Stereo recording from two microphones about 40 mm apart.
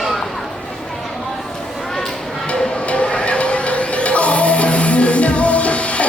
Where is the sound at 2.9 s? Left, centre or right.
Left.